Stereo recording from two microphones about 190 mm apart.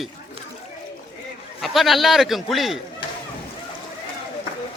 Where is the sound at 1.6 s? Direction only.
Centre (ahead or behind).